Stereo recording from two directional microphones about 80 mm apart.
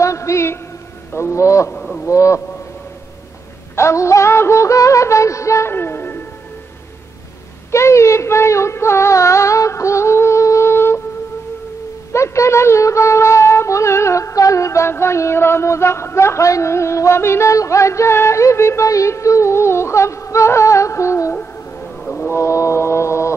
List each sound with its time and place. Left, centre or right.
0.0 s a man's voice: left
1.1 s music: left
1.7 s a sound: centre
2.0 s music: left
3.7 s music: left
7.7 s speech: left
12.1 s music: left
21.4 s a sound: centre
22.3 s music: left